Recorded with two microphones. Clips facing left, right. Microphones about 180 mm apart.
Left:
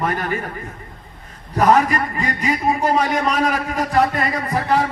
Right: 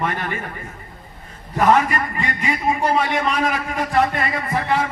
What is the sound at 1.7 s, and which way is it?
A man's voice, 40° left (ahead or behind).